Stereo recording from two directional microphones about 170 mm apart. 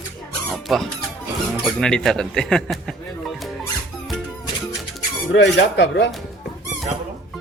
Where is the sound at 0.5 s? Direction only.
Centre (ahead or behind).